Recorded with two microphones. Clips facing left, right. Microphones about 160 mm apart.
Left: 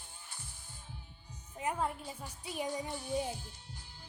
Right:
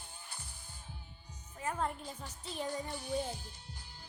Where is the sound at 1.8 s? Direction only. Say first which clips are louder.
Left 1 dB; 5° left (ahead or behind).